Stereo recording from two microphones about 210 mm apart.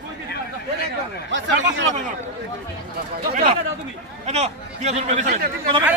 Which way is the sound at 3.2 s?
40° right (ahead or behind).